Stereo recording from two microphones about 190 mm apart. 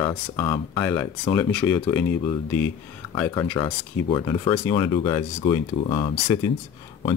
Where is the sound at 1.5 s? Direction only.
10° left (ahead or behind).